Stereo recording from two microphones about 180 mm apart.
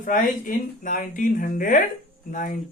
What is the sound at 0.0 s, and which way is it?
Speech, 50° left (ahead or behind).